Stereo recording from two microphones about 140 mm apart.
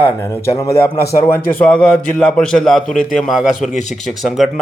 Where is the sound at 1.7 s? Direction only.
10° left (ahead or behind).